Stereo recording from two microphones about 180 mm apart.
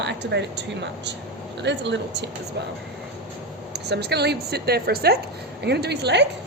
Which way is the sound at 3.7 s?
65° right (ahead or behind).